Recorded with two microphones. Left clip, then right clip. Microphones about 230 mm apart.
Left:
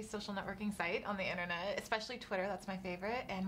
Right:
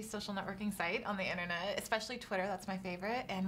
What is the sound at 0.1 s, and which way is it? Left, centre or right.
A woman's voice, left.